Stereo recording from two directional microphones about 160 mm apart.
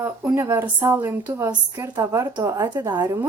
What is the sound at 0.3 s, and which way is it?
A woman's voice, 20° right (ahead or behind).